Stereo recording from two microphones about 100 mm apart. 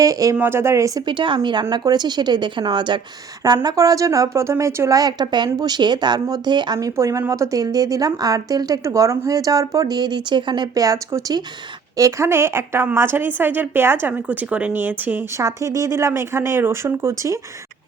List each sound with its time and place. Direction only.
0.0 s a woman's voice: 35° right (ahead or behind)
0.3 s a woman's voice: 25° right (ahead or behind)
1.0 s a woman's voice: 55° right (ahead or behind)
6.7 s a woman's voice: 30° right (ahead or behind); by 10.7 s 50° right (ahead or behind)
10.8 s a woman's voice: 35° right (ahead or behind); by 15.3 s 20° right (ahead or behind)
15.4 s a woman's voice: 30° right (ahead or behind)